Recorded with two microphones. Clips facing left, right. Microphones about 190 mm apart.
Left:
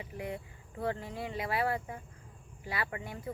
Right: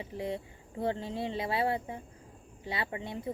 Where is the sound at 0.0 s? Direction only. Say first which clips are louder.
Right 4 dB; 30° right (ahead or behind).